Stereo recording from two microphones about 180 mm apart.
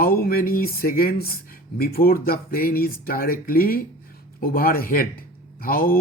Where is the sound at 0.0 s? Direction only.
55° left (ahead or behind).